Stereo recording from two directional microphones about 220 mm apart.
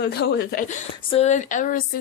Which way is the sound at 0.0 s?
45° left (ahead or behind).